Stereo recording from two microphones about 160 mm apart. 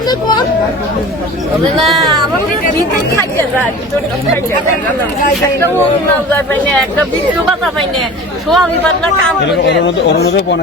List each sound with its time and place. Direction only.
0.1 s chatter: 25° left (ahead or behind)
1.9 s speech: centre (ahead or behind)
6.3 s speech: 10° left (ahead or behind)
8.4 s speech: 5° left (ahead or behind)
10.2 s speech: 90° left